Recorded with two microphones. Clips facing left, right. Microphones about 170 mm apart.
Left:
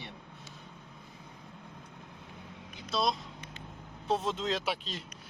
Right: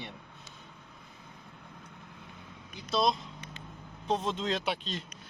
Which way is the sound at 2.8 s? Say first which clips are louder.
Right 3 dB; centre (ahead or behind).